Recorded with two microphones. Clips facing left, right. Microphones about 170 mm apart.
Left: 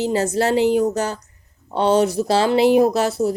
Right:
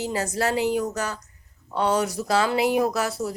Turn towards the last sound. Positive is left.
turn(degrees=25)  # may be behind; listen again after turning